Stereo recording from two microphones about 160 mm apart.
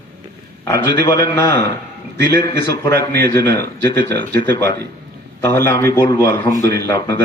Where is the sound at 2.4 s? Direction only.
20° left (ahead or behind).